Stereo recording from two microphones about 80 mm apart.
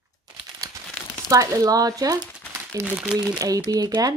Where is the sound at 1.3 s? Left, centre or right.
Right.